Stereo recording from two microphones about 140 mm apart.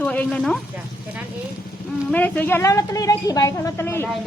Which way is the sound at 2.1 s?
15° left (ahead or behind).